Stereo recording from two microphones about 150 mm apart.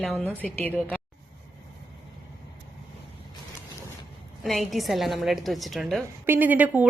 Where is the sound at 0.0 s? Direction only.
10° left (ahead or behind).